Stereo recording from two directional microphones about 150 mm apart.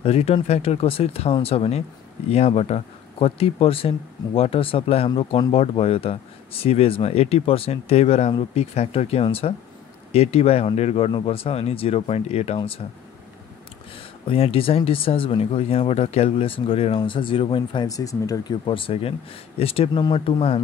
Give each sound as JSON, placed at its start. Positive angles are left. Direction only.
{"t": 0.0, "sound": "speech", "side_deg": 40}
{"t": 13.9, "sound": "speech", "side_deg": 40}